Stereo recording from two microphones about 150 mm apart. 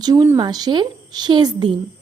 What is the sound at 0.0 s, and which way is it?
Speech, 25° right (ahead or behind).